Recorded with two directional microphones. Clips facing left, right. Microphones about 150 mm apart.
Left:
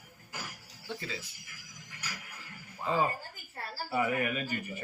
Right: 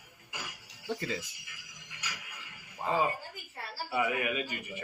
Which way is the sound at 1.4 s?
45° left (ahead or behind).